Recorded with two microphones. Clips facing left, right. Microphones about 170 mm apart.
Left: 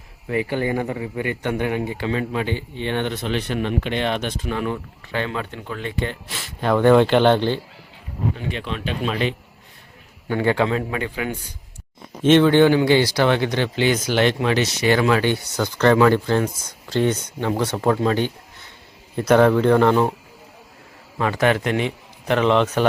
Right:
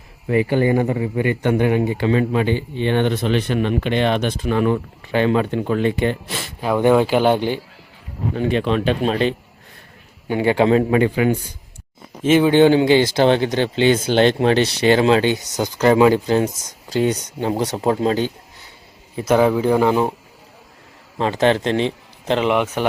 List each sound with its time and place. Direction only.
0.3 s speech: 25° right (ahead or behind); by 4.8 s 60° right (ahead or behind)
5.4 s speech: 20° right (ahead or behind)
6.6 s speech: 10° right (ahead or behind)
8.8 s speech: 40° right (ahead or behind)
10.2 s speech: 20° right (ahead or behind)
12.2 s speech: 5° right (ahead or behind)
12.5 s speech: 20° right (ahead or behind)
19.3 s speech: 5° right (ahead or behind)
21.2 s speech: 25° right (ahead or behind)